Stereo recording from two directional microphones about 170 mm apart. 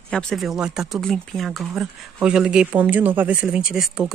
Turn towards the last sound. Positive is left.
turn(degrees=-5)  # may be behind; listen again after turning